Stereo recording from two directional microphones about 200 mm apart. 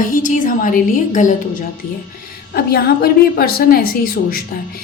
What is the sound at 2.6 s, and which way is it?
A woman's voice, 50° left (ahead or behind).